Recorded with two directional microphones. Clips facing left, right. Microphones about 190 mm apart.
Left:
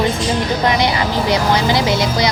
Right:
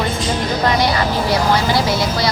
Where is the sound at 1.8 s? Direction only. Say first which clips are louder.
Left 1 dB; 20° left (ahead or behind).